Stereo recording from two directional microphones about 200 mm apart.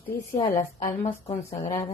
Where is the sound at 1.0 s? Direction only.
25° left (ahead or behind).